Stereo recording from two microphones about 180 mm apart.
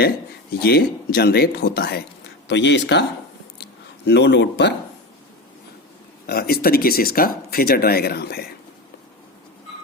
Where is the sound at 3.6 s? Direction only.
70° left (ahead or behind).